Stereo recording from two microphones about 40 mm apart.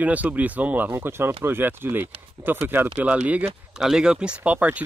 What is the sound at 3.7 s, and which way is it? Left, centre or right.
Speech, centre.